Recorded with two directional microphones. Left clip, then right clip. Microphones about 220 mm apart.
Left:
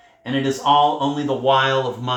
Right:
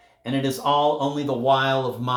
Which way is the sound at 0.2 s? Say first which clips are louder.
Left 3 dB; 55° right (ahead or behind).